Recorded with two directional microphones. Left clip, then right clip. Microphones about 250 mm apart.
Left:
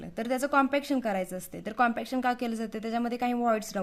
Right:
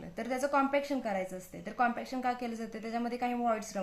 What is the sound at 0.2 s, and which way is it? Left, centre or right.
A woman's voice, left.